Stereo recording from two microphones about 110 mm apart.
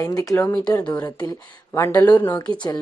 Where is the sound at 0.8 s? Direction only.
15° left (ahead or behind).